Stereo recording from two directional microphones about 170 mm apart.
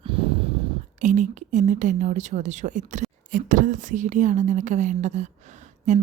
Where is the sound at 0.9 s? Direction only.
45° right (ahead or behind).